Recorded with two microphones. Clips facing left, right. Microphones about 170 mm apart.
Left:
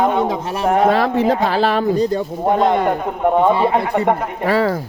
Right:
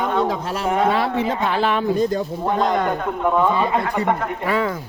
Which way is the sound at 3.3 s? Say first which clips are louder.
Left 5 dB; 30° left (ahead or behind).